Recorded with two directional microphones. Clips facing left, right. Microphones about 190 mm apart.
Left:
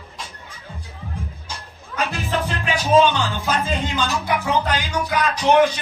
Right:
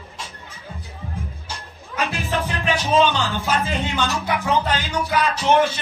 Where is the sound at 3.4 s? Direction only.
15° left (ahead or behind).